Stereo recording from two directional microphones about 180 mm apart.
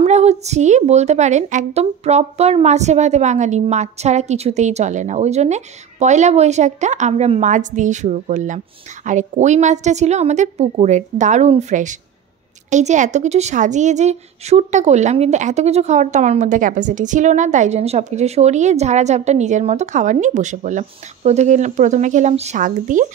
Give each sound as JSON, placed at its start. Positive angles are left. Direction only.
{"t": 0.0, "sound": "a woman's voice", "side_deg": -35}